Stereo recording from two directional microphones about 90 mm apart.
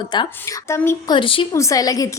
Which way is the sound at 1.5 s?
35° left (ahead or behind).